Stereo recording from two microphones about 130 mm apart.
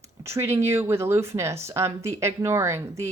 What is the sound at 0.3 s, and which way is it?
Speech, 20° right (ahead or behind).